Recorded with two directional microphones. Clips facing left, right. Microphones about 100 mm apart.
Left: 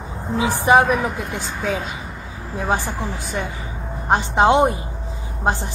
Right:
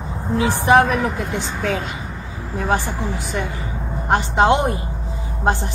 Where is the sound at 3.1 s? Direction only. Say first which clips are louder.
Right 2 dB; 15° left (ahead or behind).